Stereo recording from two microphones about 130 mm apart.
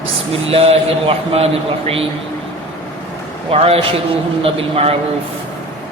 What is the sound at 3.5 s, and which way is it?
A man's voice, 50° right (ahead or behind).